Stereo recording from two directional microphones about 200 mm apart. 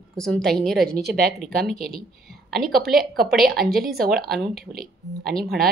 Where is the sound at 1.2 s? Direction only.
Centre (ahead or behind).